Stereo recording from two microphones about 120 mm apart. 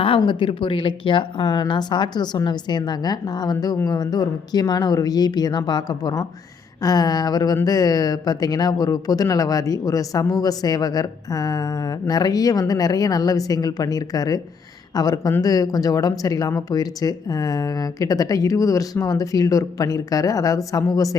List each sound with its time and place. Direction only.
0.2 s speech: 45° left (ahead or behind)